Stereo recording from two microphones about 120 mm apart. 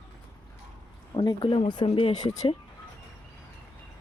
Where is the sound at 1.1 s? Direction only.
40° left (ahead or behind).